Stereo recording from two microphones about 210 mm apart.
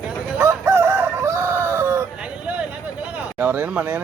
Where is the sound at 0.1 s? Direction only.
10° right (ahead or behind).